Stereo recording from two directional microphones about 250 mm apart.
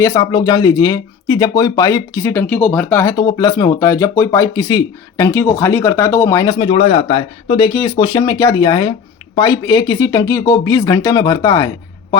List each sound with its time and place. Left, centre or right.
0.0 s speech: centre